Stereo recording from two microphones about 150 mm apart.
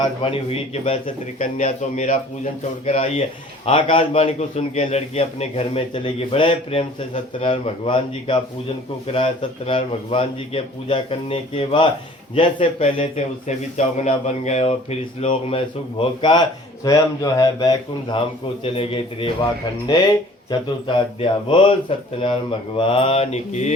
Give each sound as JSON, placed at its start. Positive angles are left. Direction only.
{"t": 0.0, "sound": "a man's voice", "side_deg": 40}
{"t": 1.4, "sound": "a man's voice", "side_deg": 55}
{"t": 16.8, "sound": "speech", "side_deg": 25}
{"t": 18.6, "sound": "a man's voice", "side_deg": 40}
{"t": 20.5, "sound": "a man's voice", "side_deg": 35}